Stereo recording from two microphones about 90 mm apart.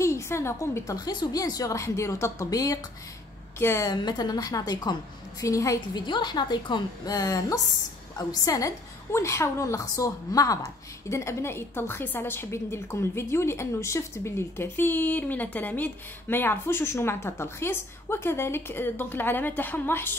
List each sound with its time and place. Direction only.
0.0 s a woman's voice: 30° left (ahead or behind)
0.9 s a woman's voice: 50° left (ahead or behind)
3.5 s a woman's voice: 30° left (ahead or behind)
3.9 s a woman's voice: 50° left (ahead or behind)
5.9 s a woman's voice: 55° left (ahead or behind); by 20.2 s 25° left (ahead or behind)